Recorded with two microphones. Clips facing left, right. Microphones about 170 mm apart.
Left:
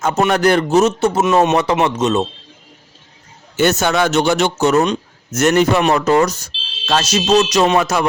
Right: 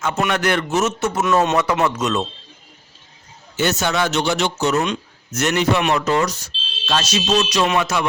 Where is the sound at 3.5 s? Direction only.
50° left (ahead or behind).